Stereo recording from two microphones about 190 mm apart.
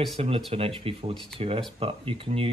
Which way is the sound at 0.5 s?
30° right (ahead or behind).